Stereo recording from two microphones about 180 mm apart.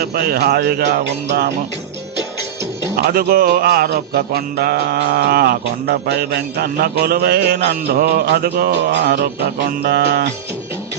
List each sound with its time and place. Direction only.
0.0 s music: 60° right (ahead or behind)
2.9 s music: 60° right (ahead or behind)